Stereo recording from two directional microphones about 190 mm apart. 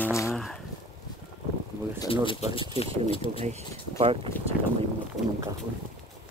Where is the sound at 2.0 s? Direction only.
25° left (ahead or behind).